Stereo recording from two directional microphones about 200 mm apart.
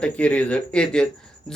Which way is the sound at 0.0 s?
5° left (ahead or behind).